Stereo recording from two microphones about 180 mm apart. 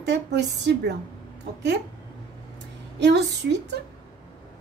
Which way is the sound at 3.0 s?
75° right (ahead or behind).